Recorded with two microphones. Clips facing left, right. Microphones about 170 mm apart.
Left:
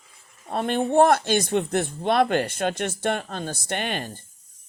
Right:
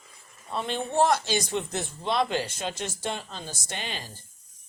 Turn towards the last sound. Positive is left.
turn(degrees=60)  # may be behind; listen again after turning